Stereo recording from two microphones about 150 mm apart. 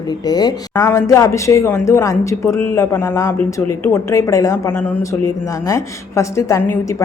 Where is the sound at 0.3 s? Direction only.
25° left (ahead or behind).